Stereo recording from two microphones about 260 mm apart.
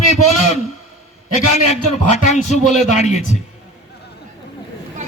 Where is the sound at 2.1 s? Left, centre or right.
Left.